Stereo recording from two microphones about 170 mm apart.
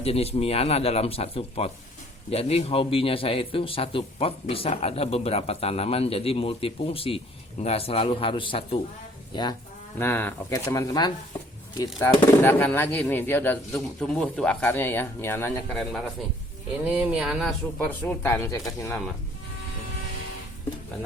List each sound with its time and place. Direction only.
0.0 s a man's voice: 35° left (ahead or behind)
10.0 s speech: 10° left (ahead or behind)
15.7 s speech: centre (ahead or behind)
17.8 s speech: 10° left (ahead or behind)